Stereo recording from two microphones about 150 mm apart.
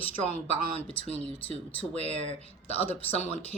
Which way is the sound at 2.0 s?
45° right (ahead or behind).